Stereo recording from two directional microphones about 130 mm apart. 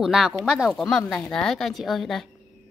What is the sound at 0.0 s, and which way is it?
A woman's voice, centre (ahead or behind).